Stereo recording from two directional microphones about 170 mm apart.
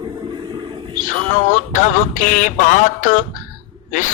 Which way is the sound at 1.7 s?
50° left (ahead or behind).